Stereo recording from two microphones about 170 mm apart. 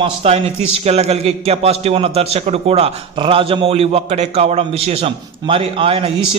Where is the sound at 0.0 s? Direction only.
35° right (ahead or behind).